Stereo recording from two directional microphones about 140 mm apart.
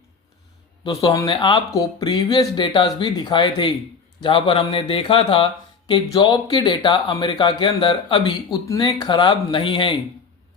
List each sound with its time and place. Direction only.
0.9 s speech: 25° left (ahead or behind)